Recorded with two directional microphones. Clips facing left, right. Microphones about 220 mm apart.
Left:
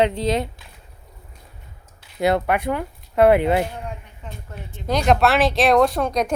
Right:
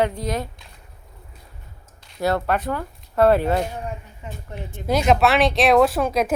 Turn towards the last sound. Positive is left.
turn(degrees=-5)  # may be behind; listen again after turning